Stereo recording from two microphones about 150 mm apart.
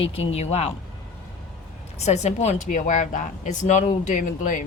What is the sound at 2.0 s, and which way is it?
A woman's voice, 50° left (ahead or behind).